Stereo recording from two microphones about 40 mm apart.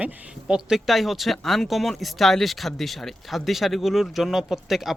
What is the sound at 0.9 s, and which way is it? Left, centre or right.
Speech, centre.